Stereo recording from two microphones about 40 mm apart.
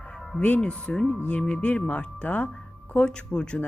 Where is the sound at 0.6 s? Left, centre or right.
Left.